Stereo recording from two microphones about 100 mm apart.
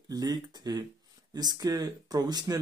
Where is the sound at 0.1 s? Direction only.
40° right (ahead or behind).